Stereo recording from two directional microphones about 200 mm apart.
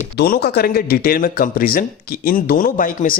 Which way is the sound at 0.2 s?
50° left (ahead or behind).